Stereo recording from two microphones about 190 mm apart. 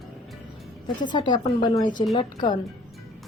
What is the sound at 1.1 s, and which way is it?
Speech, 25° left (ahead or behind).